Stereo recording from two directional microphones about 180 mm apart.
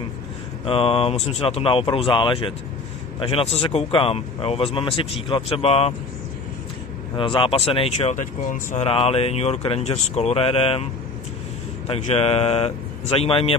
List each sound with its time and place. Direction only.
0.7 s speech: 30° left (ahead or behind)
7.2 s speech: 30° left (ahead or behind)
11.9 s speech: 35° left (ahead or behind)